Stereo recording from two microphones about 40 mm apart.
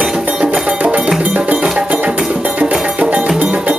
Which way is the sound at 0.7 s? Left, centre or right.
Right.